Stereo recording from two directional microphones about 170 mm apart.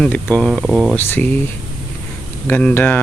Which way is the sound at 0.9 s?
10° left (ahead or behind).